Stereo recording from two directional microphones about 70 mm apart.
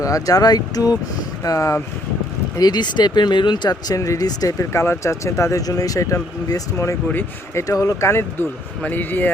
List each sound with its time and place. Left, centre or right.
0.0 s speech: left
1.5 s speech: left
2.6 s speech: left
4.5 s speech: left
8.8 s speech: left